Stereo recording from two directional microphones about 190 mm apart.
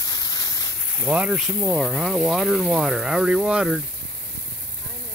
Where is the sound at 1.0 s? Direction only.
5° right (ahead or behind).